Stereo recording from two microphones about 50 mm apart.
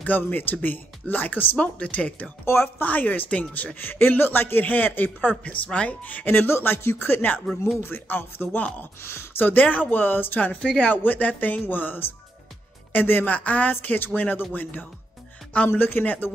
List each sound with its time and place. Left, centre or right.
0.0 s speech: left
2.4 s speech: left
2.8 s speech: left
5.4 s speech: left
9.4 s speech: left
10.6 s speech: left
10.9 s speech: left
13.7 s speech: left